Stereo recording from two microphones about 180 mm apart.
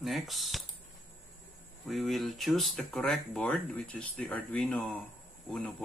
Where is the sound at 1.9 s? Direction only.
Centre (ahead or behind).